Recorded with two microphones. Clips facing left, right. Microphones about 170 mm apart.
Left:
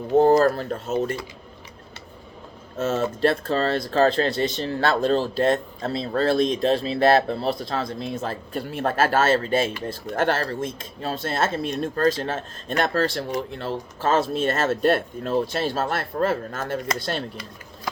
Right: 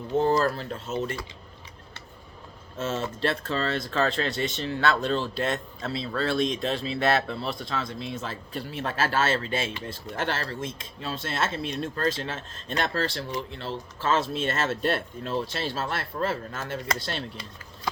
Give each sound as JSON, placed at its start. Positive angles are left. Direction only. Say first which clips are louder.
{"t": 0.1, "sound": "speech", "louder": "left 7 dB", "side_deg": 45}
{"t": 2.7, "sound": "speech", "louder": "left 6 dB", "side_deg": 40}